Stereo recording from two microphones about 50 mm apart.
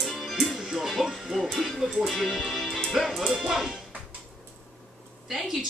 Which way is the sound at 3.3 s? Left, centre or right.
Centre.